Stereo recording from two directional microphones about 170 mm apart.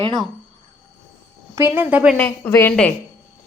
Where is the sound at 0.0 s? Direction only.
25° right (ahead or behind).